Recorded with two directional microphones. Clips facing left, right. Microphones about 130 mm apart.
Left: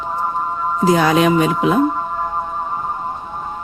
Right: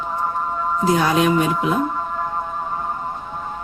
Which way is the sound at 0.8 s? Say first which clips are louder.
Left 4 dB; 90° left.